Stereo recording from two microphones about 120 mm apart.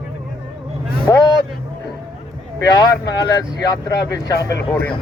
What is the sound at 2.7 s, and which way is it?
Speech, 35° left (ahead or behind).